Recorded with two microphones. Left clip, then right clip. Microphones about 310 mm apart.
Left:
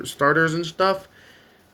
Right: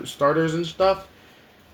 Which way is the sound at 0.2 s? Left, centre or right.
Left.